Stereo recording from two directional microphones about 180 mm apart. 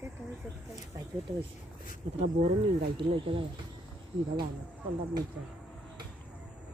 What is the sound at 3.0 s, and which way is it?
Speech, 30° right (ahead or behind).